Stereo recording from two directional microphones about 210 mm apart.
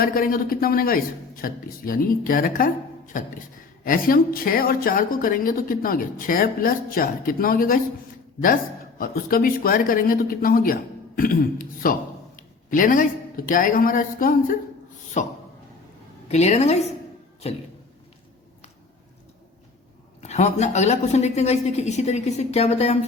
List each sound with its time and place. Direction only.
0.0 s a woman's voice: 45° left (ahead or behind)
9.0 s a woman's voice: 45° left (ahead or behind)
20.2 s a woman's voice: 35° left (ahead or behind)